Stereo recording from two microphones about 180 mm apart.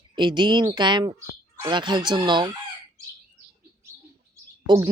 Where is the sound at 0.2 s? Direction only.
25° right (ahead or behind).